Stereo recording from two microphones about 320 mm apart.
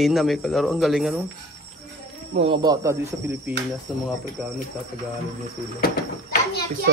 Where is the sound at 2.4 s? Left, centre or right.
Centre.